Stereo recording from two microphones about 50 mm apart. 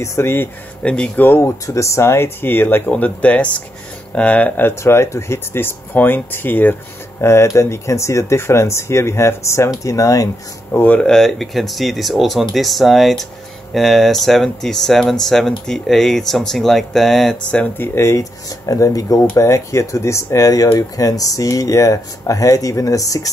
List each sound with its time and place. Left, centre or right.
0.0 s speech: left
0.8 s speech: left
1.1 s speech: left
1.7 s speech: left
3.0 s speech: left
4.6 s speech: left
7.2 s speech: left
10.7 s speech: left
11.0 s speech: centre
17.4 s speech: left
17.9 s speech: left
18.8 s speech: left
21.5 s speech: left